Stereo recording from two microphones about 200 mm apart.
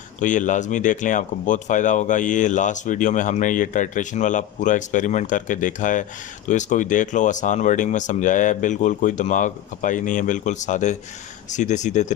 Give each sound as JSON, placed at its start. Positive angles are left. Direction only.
{"t": 0.2, "sound": "speech", "side_deg": 40}